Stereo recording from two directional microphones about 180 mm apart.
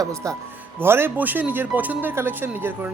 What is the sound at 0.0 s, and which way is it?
Speech, 20° right (ahead or behind).